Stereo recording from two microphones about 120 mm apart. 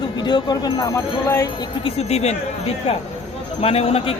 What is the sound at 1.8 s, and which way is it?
A man's voice, 60° left (ahead or behind).